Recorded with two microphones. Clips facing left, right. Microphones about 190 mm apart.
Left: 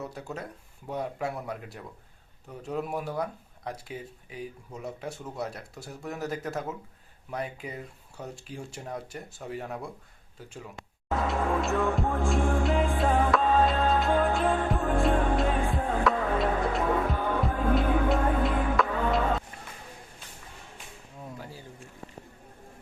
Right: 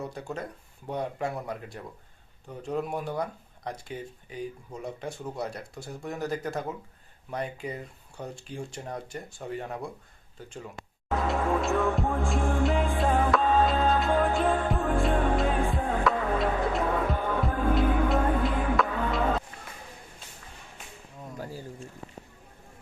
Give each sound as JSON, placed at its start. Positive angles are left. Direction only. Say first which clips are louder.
{"t": 0.0, "sound": "speech", "louder": "right 2 dB", "side_deg": 5}
{"t": 11.3, "sound": "music", "louder": "right 2 dB", "side_deg": 0}
{"t": 21.3, "sound": "a sound", "louder": "right 9 dB", "side_deg": -40}